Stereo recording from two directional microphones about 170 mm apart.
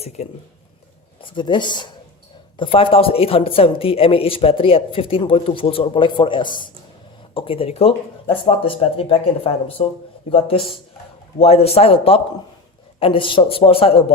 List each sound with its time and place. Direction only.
1.2 s a woman's voice: 30° left (ahead or behind)